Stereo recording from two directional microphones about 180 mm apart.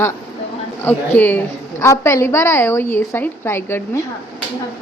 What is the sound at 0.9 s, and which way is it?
A woman's voice, 10° left (ahead or behind).